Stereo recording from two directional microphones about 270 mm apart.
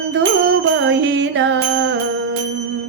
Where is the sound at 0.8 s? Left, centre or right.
Right.